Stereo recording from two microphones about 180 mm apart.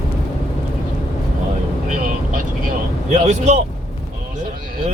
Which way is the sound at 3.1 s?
40° right (ahead or behind).